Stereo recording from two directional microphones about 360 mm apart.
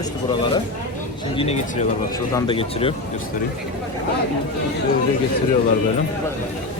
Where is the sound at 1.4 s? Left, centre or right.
Centre.